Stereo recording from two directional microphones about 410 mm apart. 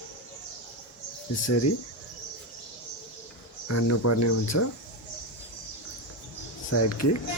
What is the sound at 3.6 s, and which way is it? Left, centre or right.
Speech, left.